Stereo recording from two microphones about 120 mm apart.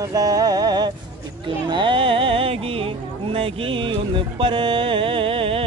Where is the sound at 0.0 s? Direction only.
30° right (ahead or behind).